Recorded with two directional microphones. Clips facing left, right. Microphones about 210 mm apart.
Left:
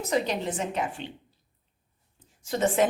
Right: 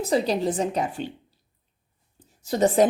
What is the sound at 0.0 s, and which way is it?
Speech, 35° right (ahead or behind).